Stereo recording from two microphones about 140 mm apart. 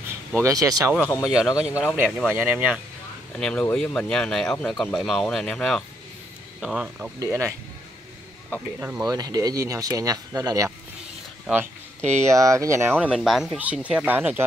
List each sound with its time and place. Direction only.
0.4 s speech: 25° right (ahead or behind)
1.2 s speech: 5° right (ahead or behind)
3.3 s speech: 5° left (ahead or behind)
7.2 s speech: 20° right (ahead or behind)
8.7 s speech: 15° right (ahead or behind)
9.0 s speech: 25° right (ahead or behind)
11.4 s speech: 10° right (ahead or behind)
12.2 s speech: 20° right (ahead or behind)
13.0 s speech: 5° right (ahead or behind)